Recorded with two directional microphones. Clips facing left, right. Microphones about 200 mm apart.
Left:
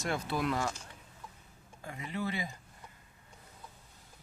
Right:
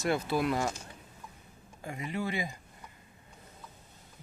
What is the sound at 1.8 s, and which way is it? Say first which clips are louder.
Speech: right 2 dB; 15° right (ahead or behind).